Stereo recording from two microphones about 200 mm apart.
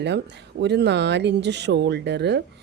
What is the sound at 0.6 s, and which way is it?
Speech, 60° right (ahead or behind).